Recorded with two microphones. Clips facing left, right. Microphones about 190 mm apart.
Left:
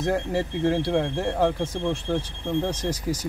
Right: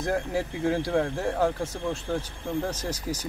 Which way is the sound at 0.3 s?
10° right (ahead or behind).